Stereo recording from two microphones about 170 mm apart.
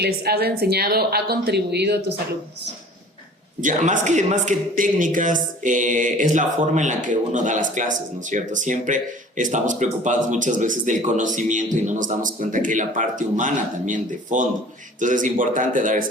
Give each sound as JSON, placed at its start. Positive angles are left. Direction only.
{"t": 0.0, "sound": "a woman's voice", "side_deg": -70}
{"t": 3.6, "sound": "a man's voice", "side_deg": -50}